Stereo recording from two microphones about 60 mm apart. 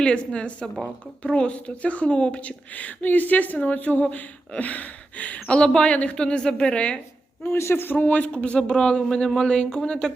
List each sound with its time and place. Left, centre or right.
0.0 s speech: centre
7.4 s a man's voice: left
7.9 s speech: left